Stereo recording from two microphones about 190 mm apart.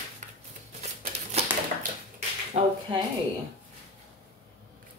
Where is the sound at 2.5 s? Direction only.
35° right (ahead or behind).